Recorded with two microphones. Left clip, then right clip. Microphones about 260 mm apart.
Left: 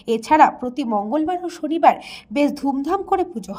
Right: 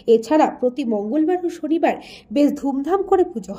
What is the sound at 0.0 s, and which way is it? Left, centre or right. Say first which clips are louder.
A woman's voice: left 1 dB; centre.